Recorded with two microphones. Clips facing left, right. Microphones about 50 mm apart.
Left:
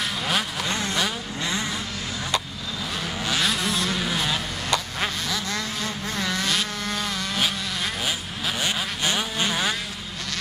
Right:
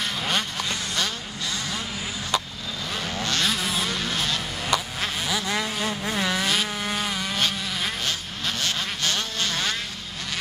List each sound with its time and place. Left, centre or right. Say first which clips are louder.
0.2 s vehicle: left 1 dB; centre
0.7 s vehicle: left 3 dB; left
3.2 s vehicle: left 1 dB; centre
4.0 s a sound: left 2 dB; centre
5.3 s vehicle: right 2 dB; centre
7.3 s vehicle: even; centre